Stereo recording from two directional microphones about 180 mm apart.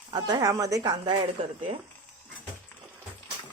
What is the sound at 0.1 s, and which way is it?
Speech, 25° right (ahead or behind).